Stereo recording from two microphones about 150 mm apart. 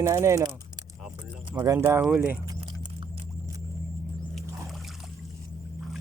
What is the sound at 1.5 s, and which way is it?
Speech, 20° right (ahead or behind).